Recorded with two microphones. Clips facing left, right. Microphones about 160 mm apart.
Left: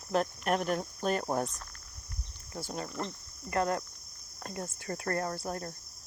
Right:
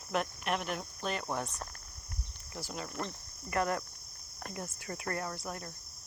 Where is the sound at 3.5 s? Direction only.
30° left (ahead or behind).